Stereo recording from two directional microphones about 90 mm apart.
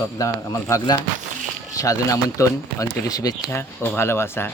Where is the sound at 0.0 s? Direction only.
35° left (ahead or behind).